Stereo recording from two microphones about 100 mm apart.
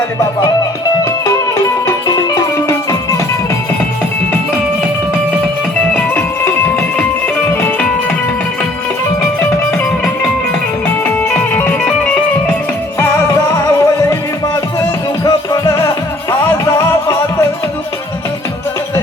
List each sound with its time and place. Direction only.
2.0 s music: 35° left (ahead or behind)
6.4 s music: 25° left (ahead or behind)
10.8 s music: 15° left (ahead or behind)
13.0 s music: 30° left (ahead or behind)